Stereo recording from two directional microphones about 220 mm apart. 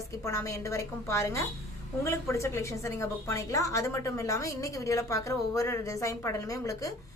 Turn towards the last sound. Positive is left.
turn(degrees=15)  # may be behind; listen again after turning